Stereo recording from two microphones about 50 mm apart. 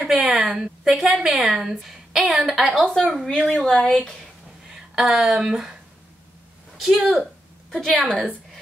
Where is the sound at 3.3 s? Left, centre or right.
Centre.